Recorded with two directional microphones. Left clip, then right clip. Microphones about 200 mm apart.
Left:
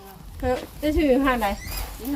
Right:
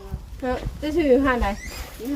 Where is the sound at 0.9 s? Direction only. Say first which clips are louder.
Right 2 dB; 10° right (ahead or behind).